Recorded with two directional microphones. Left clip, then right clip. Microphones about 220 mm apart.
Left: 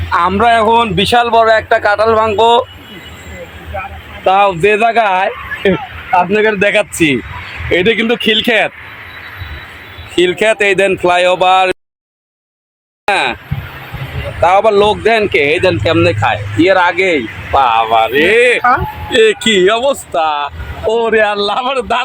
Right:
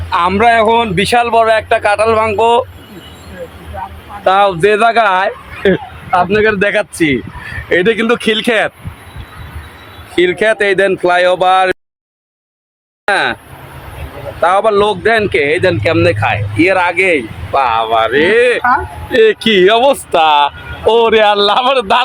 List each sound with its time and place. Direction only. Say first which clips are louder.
0.1 s speech: even; centre (ahead or behind)
4.2 s speech: even; centre (ahead or behind)
10.2 s speech: even; 5° left (ahead or behind)
13.1 s speech: even; centre (ahead or behind)
14.4 s speech: left 1 dB; 15° left (ahead or behind); by 19.4 s centre (ahead or behind)
19.6 s speech: right 3 dB; 30° right (ahead or behind)